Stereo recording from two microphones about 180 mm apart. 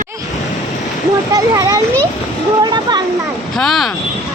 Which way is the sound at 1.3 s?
20° right (ahead or behind).